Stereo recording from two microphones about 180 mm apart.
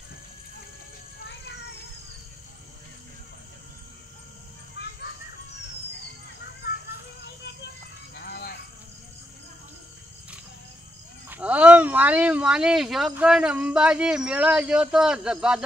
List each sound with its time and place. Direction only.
6.6 s children playing: 65° left (ahead or behind)
8.1 s a sound: 60° left (ahead or behind)
11.2 s speech: 10° right (ahead or behind)